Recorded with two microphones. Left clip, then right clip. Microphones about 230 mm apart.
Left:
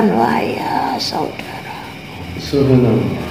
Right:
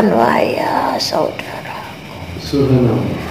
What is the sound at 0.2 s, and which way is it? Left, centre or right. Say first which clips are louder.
Speech: right 3 dB; right.